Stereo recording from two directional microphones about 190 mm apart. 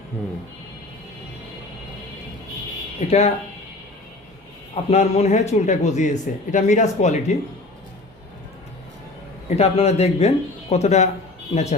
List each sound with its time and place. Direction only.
3.1 s speech: 35° left (ahead or behind)
4.7 s speech: 35° left (ahead or behind)
9.6 s speech: 35° left (ahead or behind)